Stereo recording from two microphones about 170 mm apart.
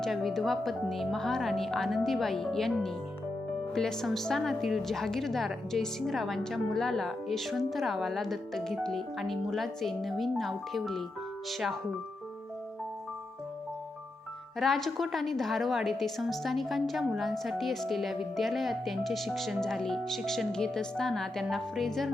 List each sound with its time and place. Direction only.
0.0 s a woman's voice: centre (ahead or behind)
14.6 s a woman's voice: centre (ahead or behind)